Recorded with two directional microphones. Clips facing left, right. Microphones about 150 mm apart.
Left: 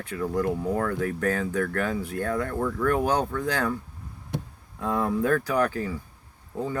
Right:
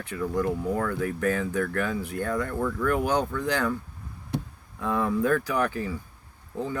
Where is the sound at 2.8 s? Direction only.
75° left (ahead or behind).